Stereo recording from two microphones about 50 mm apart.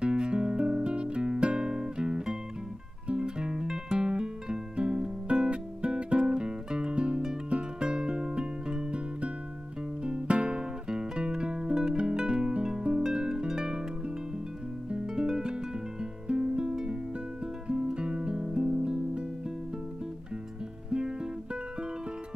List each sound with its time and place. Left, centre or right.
0.0 s music: centre
15.1 s music: centre
20.9 s guitar: centre